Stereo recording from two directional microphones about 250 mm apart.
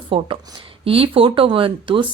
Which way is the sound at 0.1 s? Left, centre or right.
Right.